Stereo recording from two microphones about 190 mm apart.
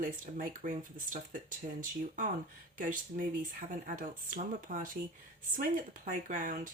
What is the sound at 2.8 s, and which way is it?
Speech, 45° right (ahead or behind).